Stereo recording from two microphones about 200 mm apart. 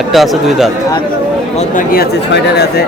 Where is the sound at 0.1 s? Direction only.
Centre (ahead or behind).